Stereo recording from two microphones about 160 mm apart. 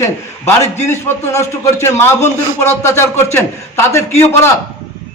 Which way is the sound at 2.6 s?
15° left (ahead or behind).